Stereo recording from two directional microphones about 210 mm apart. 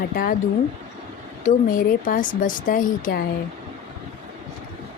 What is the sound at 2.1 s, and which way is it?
Speech, 40° left (ahead or behind).